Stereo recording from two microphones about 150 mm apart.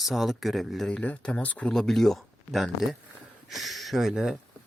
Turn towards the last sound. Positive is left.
turn(degrees=0)  # may be behind; listen again after turning